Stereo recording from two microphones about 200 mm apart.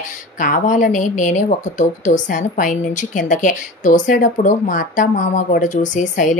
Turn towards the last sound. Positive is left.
turn(degrees=40)  # may be behind; listen again after turning